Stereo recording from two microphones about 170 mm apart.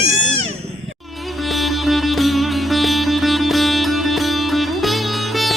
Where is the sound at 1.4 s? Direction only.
Centre (ahead or behind).